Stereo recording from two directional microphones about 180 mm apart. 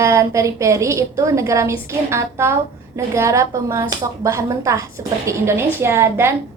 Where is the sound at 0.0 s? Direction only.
15° right (ahead or behind).